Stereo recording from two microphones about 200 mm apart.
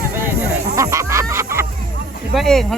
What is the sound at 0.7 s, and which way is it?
Music, 15° right (ahead or behind).